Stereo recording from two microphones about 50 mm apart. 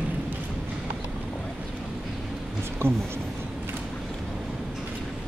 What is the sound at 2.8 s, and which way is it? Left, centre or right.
Speech, right.